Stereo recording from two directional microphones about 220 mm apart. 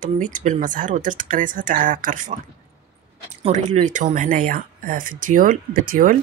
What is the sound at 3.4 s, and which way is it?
Speech, 30° right (ahead or behind).